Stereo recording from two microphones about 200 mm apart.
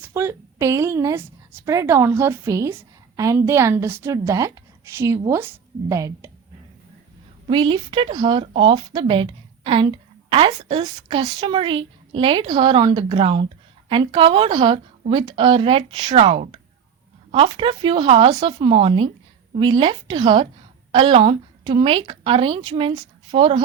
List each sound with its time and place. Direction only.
0.0 s a woman's voice: 15° right (ahead or behind)
7.5 s a woman's voice: 25° right (ahead or behind)